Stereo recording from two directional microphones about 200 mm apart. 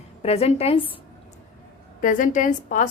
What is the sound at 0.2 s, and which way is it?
Speech, 30° left (ahead or behind).